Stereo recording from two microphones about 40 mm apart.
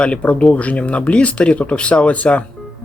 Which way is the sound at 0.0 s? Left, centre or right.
Left.